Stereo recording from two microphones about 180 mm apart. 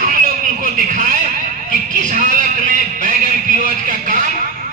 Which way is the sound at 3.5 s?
50° right (ahead or behind).